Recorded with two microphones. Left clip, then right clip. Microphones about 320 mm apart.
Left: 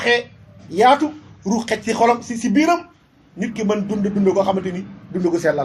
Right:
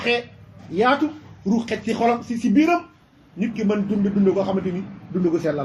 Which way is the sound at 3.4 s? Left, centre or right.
Left.